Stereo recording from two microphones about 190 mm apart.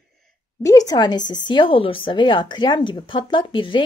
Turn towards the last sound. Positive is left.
turn(degrees=25)  # may be behind; listen again after turning